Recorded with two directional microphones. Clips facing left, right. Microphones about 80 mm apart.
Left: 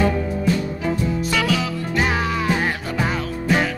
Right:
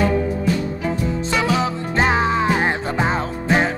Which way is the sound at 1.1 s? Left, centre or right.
Right.